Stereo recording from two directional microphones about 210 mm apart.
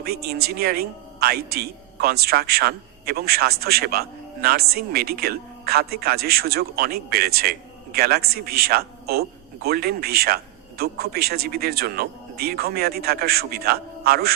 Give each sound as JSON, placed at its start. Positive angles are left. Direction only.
{"t": 0.0, "sound": "speech", "side_deg": -50}